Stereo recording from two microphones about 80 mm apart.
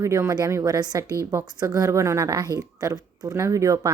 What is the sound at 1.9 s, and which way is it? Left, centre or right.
Speech, right.